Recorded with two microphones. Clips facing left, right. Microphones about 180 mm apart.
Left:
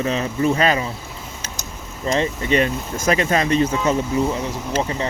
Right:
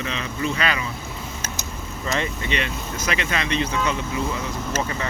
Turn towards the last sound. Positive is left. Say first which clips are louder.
# left 3 dB
turn(degrees=30)  # may be behind; listen again after turning